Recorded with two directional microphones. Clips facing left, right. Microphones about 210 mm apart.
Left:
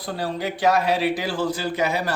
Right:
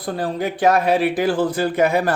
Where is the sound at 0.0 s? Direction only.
50° right (ahead or behind).